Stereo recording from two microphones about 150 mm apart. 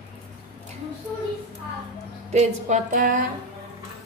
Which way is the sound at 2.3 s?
50° right (ahead or behind).